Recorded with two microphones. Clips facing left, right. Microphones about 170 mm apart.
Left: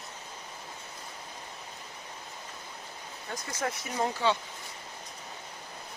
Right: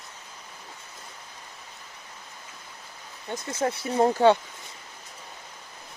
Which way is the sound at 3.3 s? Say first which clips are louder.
Right 6 dB; 25° right (ahead or behind).